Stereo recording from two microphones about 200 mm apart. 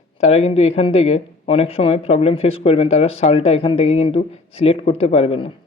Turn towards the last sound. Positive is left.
turn(degrees=25)  # may be behind; listen again after turning